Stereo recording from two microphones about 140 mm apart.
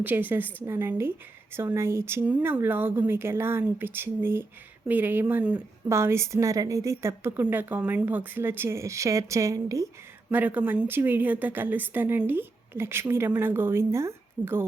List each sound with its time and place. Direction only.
0.0 s a woman's voice: 15° right (ahead or behind)